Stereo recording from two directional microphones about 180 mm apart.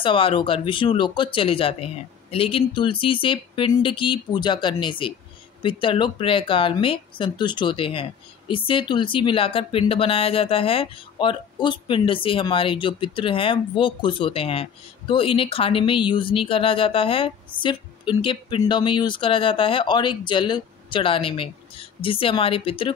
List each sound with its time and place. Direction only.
0.0 s speech: 30° left (ahead or behind)